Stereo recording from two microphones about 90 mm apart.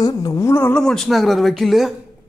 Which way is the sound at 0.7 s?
5° left (ahead or behind).